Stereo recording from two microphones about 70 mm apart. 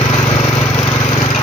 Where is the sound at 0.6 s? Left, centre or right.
Left.